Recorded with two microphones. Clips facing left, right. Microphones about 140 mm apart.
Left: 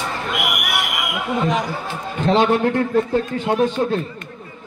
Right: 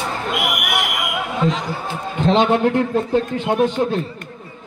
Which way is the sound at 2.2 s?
20° right (ahead or behind).